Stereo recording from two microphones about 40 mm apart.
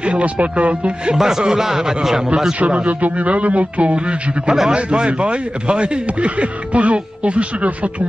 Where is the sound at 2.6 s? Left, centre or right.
Right.